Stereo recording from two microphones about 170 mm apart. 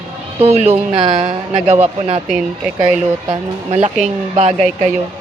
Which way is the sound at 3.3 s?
40° right (ahead or behind).